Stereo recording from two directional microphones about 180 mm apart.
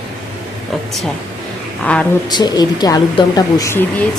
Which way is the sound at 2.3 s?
25° left (ahead or behind).